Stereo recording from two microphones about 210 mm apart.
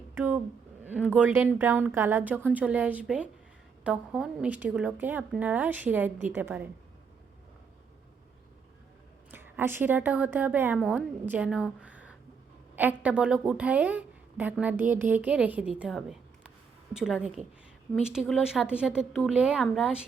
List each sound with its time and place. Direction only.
0.1 s a sound: 10° right (ahead or behind)
1.2 s a woman's voice: 10° right (ahead or behind)
9.3 s a woman's voice: 10° right (ahead or behind)